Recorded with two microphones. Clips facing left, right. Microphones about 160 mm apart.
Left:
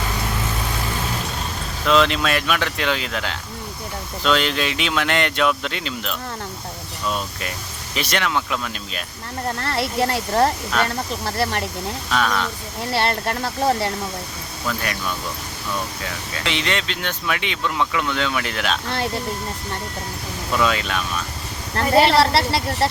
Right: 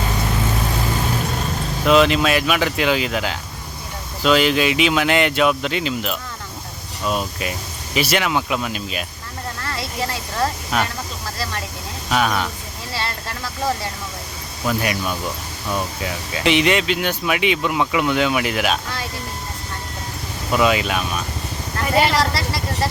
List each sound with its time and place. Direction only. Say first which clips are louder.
1.8 s speech: right 3 dB; 5° right (ahead or behind)
9.6 s speech: left 5 dB; 65° left (ahead or behind)
10.7 s speech: even; 10° right (ahead or behind)
12.1 s speech: right 2 dB; 10° right (ahead or behind)
12.9 s speech: left 7 dB; 60° left (ahead or behind)
14.7 s speech: right 4 dB; 10° right (ahead or behind)
16.4 s speech: right 8 dB; 15° right (ahead or behind)
20.5 s speech: right 3 dB; 10° right (ahead or behind)
22.3 s speech: left 4 dB; 65° left (ahead or behind)